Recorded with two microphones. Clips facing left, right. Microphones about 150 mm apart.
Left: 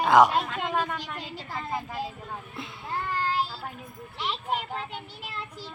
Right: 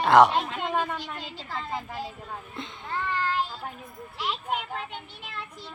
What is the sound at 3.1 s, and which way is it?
Child singing, 35° left (ahead or behind).